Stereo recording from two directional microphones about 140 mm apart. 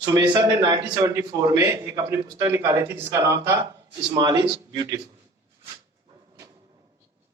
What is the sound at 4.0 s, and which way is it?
Speech, 30° right (ahead or behind).